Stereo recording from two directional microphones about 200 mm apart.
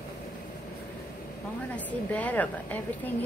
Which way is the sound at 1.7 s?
5° left (ahead or behind).